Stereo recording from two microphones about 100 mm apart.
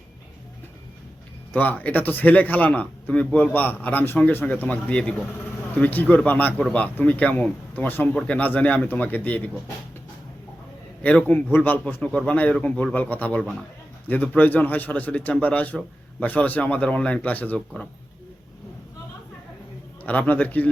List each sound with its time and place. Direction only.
1.5 s a man's voice: 15° left (ahead or behind)
11.0 s a man's voice: 15° left (ahead or behind)
13.4 s a man's voice: centre (ahead or behind)
14.1 s a man's voice: 15° left (ahead or behind)
20.1 s a man's voice: 15° left (ahead or behind)